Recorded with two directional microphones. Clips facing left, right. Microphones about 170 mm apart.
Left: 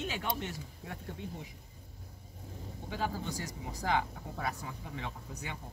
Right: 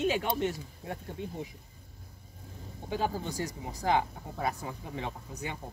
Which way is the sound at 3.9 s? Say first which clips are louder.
Right 4 dB; 20° right (ahead or behind).